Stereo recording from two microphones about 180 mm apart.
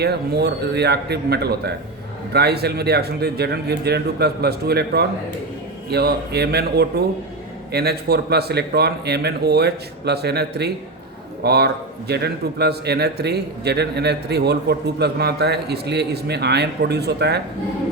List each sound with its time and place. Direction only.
0.0 s a man's voice: 65° right (ahead or behind)